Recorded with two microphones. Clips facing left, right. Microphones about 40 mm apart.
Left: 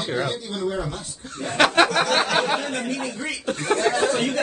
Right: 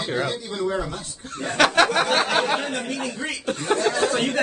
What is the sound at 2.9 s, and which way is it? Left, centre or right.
Speech, right.